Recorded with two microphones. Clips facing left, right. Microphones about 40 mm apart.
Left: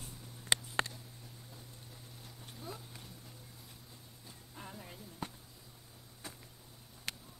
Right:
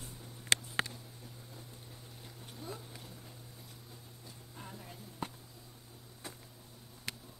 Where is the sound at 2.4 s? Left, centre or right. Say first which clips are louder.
Right 2 dB; centre.